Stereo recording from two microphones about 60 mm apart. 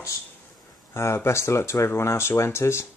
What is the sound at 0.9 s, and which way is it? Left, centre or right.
Speech, left.